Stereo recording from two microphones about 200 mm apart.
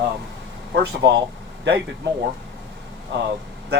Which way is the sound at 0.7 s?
60° right (ahead or behind).